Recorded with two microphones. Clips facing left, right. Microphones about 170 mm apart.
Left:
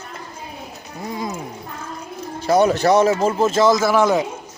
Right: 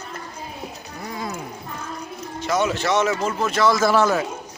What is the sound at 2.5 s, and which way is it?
A man's voice, 35° left (ahead or behind).